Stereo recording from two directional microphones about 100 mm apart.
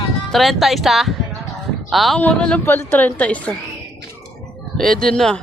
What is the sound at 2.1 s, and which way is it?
Speech, 10° left (ahead or behind).